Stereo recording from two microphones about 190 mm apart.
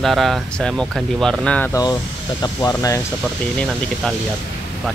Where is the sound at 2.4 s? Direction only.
20° left (ahead or behind).